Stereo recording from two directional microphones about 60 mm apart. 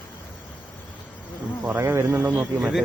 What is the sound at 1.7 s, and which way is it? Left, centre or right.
Speech, right.